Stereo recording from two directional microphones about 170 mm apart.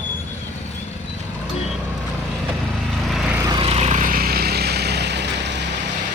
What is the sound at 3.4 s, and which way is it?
Insect, 30° right (ahead or behind).